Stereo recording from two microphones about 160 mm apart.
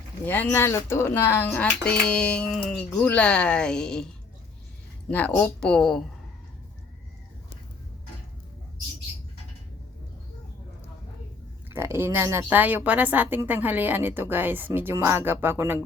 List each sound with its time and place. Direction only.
0.3 s speech: 10° left (ahead or behind)
11.7 s speech: 15° right (ahead or behind)